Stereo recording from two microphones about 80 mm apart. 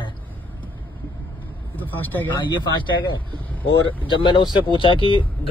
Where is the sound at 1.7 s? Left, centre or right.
Left.